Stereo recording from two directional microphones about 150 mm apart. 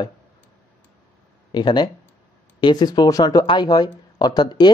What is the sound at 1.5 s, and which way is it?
Speech, 30° left (ahead or behind).